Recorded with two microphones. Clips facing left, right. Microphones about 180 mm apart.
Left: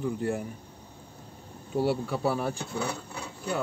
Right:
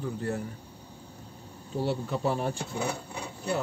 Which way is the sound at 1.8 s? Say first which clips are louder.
Left 1 dB; 5° left (ahead or behind).